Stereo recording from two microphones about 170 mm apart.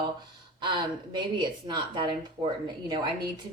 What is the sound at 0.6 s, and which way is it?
Speech, 30° right (ahead or behind).